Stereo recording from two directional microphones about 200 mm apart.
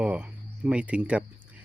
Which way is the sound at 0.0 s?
5° right (ahead or behind).